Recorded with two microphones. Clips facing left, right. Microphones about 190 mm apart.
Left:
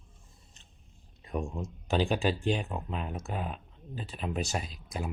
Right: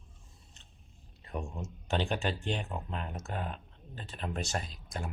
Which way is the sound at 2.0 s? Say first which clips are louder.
Left 5 dB; 10° left (ahead or behind).